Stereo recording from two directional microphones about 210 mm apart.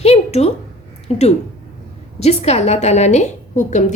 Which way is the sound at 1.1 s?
30° left (ahead or behind).